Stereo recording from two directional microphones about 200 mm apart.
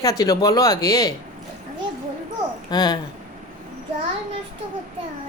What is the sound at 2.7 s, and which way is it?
Speech, 20° left (ahead or behind).